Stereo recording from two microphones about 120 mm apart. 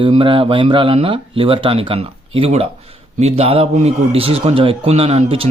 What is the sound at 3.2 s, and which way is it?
A man's voice, 65° right (ahead or behind).